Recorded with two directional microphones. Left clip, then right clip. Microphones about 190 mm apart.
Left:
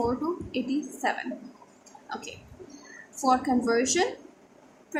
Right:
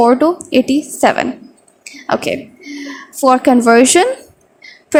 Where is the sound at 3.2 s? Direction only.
50° right (ahead or behind).